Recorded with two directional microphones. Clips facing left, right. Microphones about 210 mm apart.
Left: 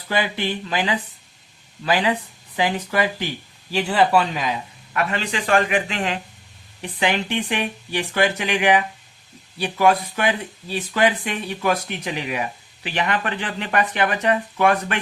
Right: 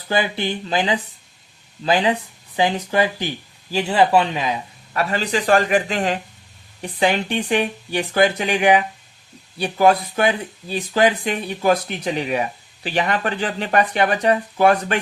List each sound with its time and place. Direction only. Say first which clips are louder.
0.1 s speech: right 2 dB; 30° right (ahead or behind)
4.9 s speech: right 3 dB; 35° right (ahead or behind)